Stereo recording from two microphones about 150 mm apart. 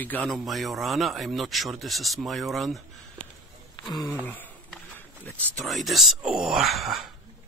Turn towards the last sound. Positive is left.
turn(degrees=0)  # may be behind; listen again after turning